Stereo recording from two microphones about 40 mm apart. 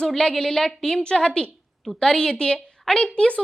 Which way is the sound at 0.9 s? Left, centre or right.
Left.